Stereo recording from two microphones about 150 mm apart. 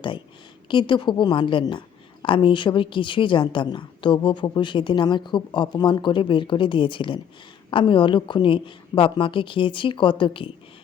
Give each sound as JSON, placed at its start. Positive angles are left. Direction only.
{"t": 0.7, "sound": "a woman's voice", "side_deg": 30}